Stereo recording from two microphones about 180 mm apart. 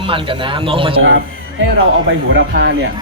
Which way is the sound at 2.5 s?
65° right (ahead or behind).